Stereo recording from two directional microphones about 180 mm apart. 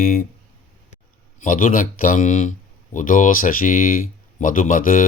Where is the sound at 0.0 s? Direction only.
55° left (ahead or behind).